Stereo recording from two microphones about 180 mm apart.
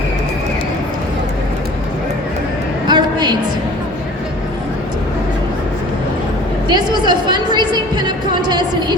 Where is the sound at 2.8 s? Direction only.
25° right (ahead or behind).